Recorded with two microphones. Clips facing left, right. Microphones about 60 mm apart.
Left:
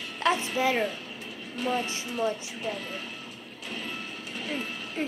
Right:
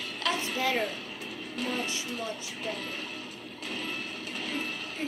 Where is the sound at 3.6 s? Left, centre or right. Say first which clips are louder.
Even; right.